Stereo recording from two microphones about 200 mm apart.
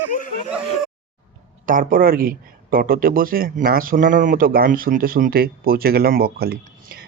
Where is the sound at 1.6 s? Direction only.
45° right (ahead or behind).